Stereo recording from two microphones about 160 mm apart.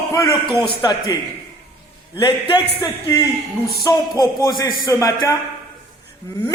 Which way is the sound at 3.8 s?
20° left (ahead or behind).